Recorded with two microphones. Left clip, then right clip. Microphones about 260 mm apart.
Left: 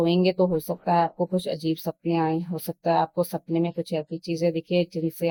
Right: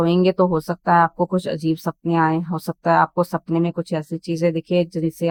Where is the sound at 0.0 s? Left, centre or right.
Centre.